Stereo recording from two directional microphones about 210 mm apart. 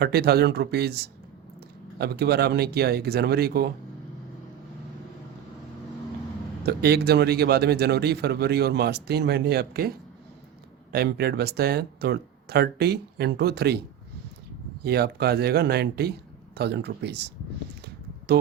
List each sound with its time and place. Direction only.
0.0 s a man's voice: 50° right (ahead or behind)
6.7 s a man's voice: 50° right (ahead or behind)
10.9 s a man's voice: 50° right (ahead or behind)
14.8 s a man's voice: 50° right (ahead or behind)